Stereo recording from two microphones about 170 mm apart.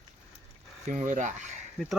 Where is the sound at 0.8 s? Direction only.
45° right (ahead or behind).